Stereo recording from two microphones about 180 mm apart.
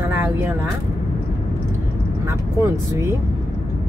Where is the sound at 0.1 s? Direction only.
10° right (ahead or behind).